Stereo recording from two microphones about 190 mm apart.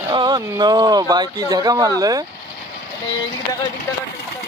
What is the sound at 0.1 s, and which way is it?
Speech, 20° right (ahead or behind).